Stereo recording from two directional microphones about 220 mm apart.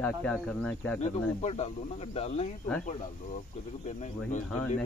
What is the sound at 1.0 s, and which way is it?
Speech, 30° left (ahead or behind).